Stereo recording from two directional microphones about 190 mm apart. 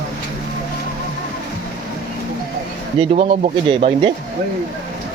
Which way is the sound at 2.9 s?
30° right (ahead or behind).